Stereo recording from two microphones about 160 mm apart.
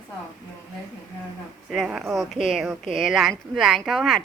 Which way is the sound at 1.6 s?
5° right (ahead or behind).